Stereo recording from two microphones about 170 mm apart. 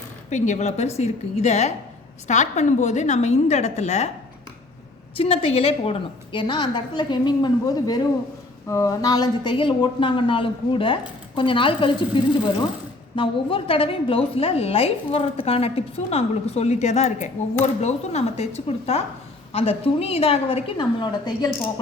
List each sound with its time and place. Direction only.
0.3 s a woman's voice: 45° left (ahead or behind)
5.1 s a woman's voice: 35° left (ahead or behind)